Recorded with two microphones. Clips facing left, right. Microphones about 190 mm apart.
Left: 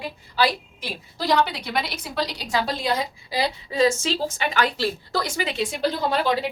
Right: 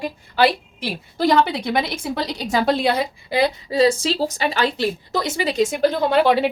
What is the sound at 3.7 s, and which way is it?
A woman's voice, 35° right (ahead or behind).